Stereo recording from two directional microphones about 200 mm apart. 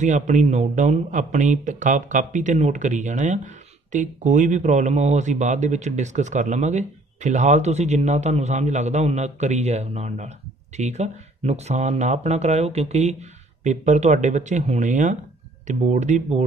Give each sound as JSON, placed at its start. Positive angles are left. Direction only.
{"t": 0.0, "sound": "a man's voice", "side_deg": -35}